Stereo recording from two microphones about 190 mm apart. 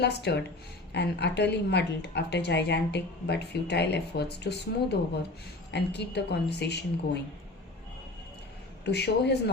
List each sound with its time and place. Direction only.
0.0 s a woman's voice: 60° left (ahead or behind)
8.8 s a woman's voice: 60° left (ahead or behind)